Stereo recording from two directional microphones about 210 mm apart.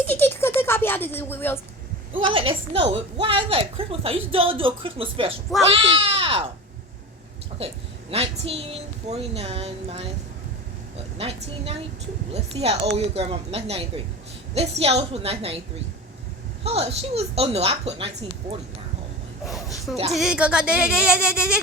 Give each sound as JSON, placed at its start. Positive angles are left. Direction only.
{"t": 0.1, "sound": "speech", "side_deg": 10}
{"t": 2.1, "sound": "a woman's voice", "side_deg": -25}
{"t": 7.6, "sound": "a woman's voice", "side_deg": -30}
{"t": 16.6, "sound": "a woman's voice", "side_deg": -30}
{"t": 19.5, "sound": "speech", "side_deg": 0}